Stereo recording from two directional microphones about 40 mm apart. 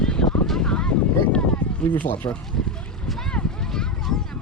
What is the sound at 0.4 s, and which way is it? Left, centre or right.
Vehicle, centre.